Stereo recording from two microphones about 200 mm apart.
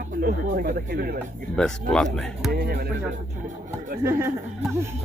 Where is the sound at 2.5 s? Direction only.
50° right (ahead or behind).